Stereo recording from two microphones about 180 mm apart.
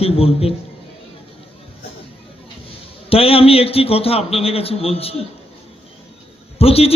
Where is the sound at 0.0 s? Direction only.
35° left (ahead or behind).